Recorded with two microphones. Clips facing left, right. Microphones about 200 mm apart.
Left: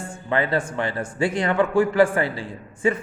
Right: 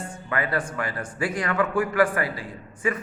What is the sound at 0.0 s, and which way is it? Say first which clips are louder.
Speech: left 4 dB; 25° left (ahead or behind).